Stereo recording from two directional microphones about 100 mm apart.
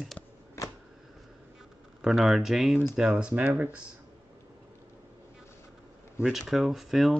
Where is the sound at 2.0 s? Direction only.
Centre (ahead or behind); by 3.8 s 15° right (ahead or behind).